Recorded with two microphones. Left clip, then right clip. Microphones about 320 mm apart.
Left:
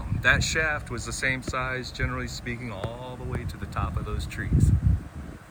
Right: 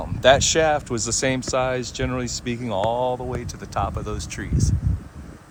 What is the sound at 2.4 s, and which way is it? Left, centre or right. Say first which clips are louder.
Speech: right 9 dB; right.